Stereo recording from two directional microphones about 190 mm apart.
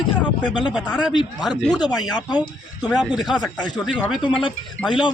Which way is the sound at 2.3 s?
20° left (ahead or behind).